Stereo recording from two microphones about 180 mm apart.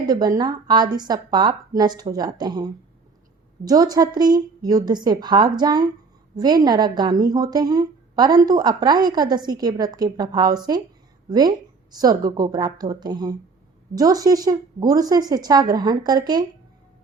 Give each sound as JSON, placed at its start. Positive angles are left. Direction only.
{"t": 0.1, "sound": "speech", "side_deg": -20}